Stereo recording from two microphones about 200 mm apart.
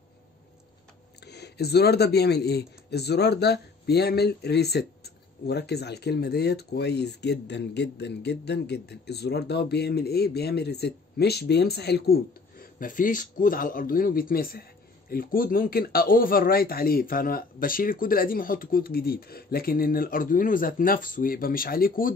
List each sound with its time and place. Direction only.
1.2 s speech: 55° left (ahead or behind)